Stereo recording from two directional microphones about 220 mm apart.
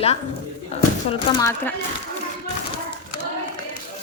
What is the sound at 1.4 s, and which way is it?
Speech, 15° left (ahead or behind).